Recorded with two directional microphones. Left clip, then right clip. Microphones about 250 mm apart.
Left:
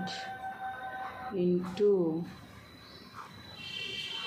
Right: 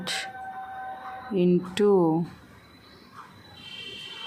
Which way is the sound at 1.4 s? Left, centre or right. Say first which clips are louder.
Right 6 dB; right.